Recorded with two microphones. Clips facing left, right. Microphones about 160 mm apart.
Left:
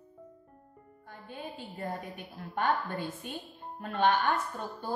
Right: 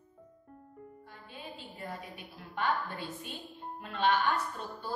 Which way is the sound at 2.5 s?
50° left (ahead or behind).